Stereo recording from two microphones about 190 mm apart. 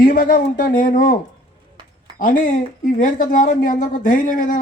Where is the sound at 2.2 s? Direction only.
45° left (ahead or behind).